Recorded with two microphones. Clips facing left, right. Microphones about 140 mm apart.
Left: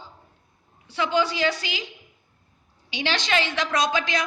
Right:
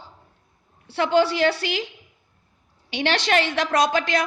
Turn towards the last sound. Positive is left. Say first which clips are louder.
# right 4 dB
turn(degrees=-55)  # may be behind; listen again after turning